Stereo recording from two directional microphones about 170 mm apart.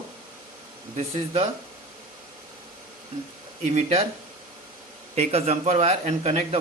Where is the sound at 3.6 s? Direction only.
40° right (ahead or behind).